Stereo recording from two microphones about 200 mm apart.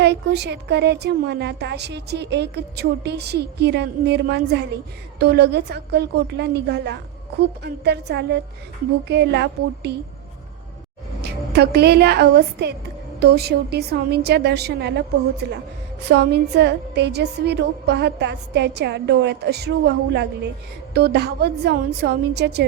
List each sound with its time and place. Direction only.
0.0 s a woman's voice: 55° right (ahead or behind)
11.2 s a woman's voice: 55° right (ahead or behind)